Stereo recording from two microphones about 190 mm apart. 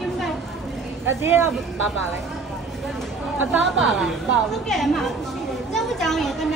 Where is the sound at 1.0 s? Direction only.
10° right (ahead or behind).